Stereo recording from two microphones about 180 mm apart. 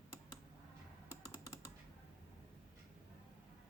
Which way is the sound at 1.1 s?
15° left (ahead or behind).